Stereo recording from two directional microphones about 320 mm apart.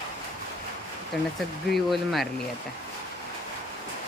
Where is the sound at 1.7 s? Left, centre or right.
Centre.